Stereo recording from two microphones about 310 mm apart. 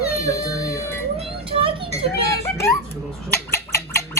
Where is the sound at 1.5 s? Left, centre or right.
Centre.